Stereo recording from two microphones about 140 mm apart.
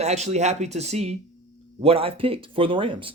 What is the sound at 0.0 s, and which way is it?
Speech, 50° right (ahead or behind).